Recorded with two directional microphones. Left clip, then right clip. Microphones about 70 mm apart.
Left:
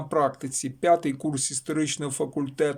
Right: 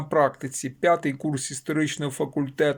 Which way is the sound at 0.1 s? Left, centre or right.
Left.